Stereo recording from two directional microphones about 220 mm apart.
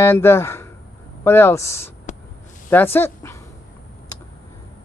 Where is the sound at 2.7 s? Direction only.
10° left (ahead or behind).